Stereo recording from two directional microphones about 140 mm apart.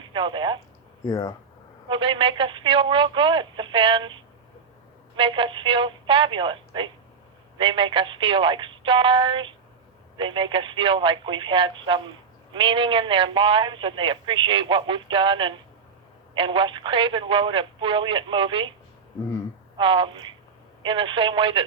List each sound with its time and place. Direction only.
0.1 s a man's voice: 35° right (ahead or behind)
1.0 s speech: 25° left (ahead or behind)
1.9 s a man's voice: 35° right (ahead or behind)
5.1 s a man's voice: 35° right (ahead or behind)
19.7 s a man's voice: 35° right (ahead or behind)